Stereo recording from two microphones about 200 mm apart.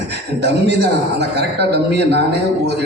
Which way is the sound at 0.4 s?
60° right (ahead or behind).